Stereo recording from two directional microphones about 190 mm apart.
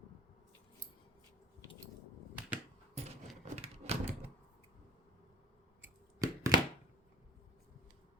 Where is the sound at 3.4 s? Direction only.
35° right (ahead or behind).